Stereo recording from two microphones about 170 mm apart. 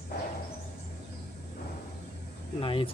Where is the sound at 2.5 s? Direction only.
30° left (ahead or behind).